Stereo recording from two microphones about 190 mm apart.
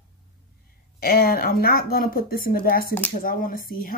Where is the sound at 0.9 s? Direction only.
50° left (ahead or behind).